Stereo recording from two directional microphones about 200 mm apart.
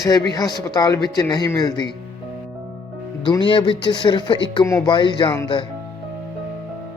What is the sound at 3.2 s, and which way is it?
Speech, 25° left (ahead or behind).